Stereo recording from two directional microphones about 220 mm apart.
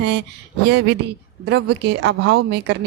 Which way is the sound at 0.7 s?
50° right (ahead or behind).